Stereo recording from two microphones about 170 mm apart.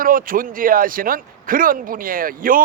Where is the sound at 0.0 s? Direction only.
55° right (ahead or behind).